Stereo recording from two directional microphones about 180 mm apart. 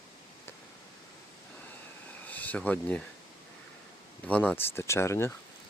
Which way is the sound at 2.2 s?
10° left (ahead or behind).